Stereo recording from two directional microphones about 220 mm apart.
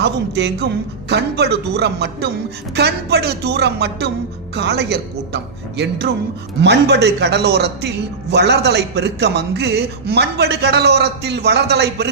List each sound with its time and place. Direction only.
0.0 s a man's voice: 50° right (ahead or behind)